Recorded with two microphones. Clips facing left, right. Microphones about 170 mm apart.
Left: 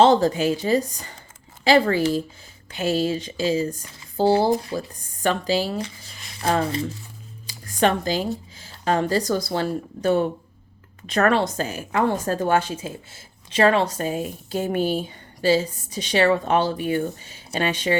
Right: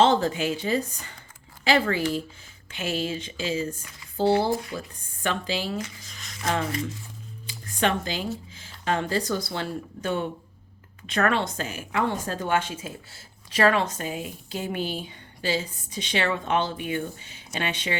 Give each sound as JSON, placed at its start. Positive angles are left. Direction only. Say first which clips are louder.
{"t": 0.0, "sound": "a woman's voice", "louder": "left 5 dB", "side_deg": 35}